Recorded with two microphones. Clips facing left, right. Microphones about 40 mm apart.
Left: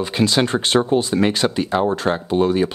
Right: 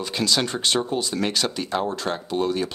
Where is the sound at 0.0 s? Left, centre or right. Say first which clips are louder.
Left 5 dB; left.